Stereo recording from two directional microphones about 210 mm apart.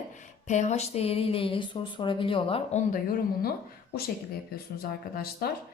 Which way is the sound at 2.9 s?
40° left (ahead or behind).